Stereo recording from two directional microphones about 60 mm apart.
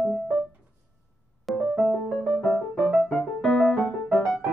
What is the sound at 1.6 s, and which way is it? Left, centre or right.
Music, centre.